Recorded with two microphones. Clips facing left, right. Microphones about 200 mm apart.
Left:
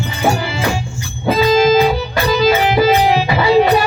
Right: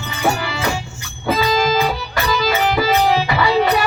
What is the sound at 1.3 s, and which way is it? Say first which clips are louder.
Music: left 6 dB; 25° left (ahead or behind).